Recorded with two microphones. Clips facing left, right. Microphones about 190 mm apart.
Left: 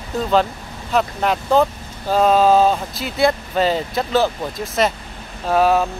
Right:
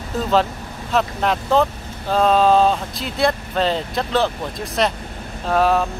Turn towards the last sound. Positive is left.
turn(degrees=5)  # may be behind; listen again after turning